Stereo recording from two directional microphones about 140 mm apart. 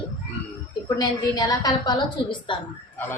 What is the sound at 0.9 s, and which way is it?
A woman's voice, 25° left (ahead or behind).